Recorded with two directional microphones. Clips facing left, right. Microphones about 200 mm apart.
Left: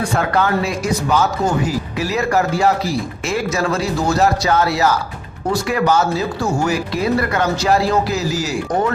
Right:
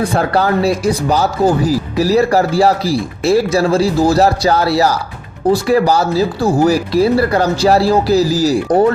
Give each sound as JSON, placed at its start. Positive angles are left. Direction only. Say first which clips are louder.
{"t": 0.0, "sound": "speech", "louder": "right 3 dB", "side_deg": -35}